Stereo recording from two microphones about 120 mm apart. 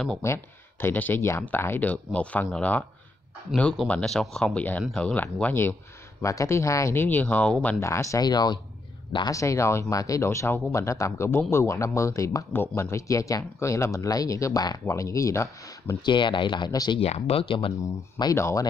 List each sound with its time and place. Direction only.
0.2 s speech: 20° left (ahead or behind)
7.8 s speech: 25° left (ahead or behind)
16.1 s speech: 40° left (ahead or behind)
17.0 s speech: 55° left (ahead or behind)
18.3 s speech: 25° left (ahead or behind)